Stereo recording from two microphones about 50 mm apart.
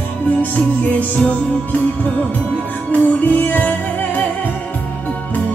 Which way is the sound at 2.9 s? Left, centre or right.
Left.